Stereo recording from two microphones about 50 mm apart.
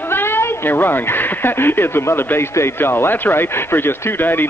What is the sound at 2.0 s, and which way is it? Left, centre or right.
Speech, left.